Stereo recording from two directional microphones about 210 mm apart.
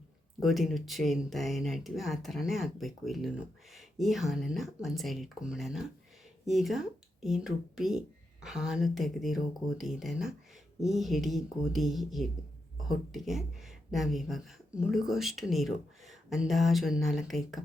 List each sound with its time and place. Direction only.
0.4 s speech: centre (ahead or behind)